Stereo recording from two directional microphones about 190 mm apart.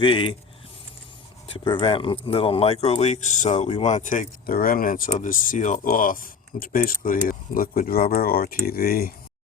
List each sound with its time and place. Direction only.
0.0 s speech: 25° left (ahead or behind)
1.5 s speech: 25° left (ahead or behind); by 9.1 s 50° left (ahead or behind)